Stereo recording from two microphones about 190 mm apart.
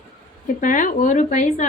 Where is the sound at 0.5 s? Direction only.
45° left (ahead or behind).